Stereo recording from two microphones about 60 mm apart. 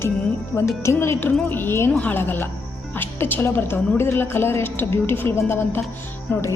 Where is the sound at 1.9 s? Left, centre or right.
Left.